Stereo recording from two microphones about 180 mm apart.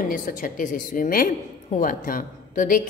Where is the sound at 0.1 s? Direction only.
50° left (ahead or behind).